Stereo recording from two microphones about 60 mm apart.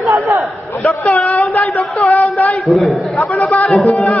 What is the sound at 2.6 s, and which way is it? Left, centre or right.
Speech, centre.